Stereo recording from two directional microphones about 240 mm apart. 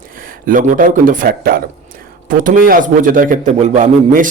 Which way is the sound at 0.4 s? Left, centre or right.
Right.